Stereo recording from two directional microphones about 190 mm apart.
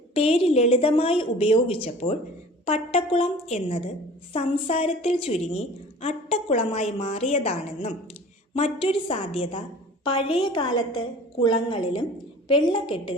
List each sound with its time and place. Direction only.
0.1 s a woman's voice: 30° left (ahead or behind)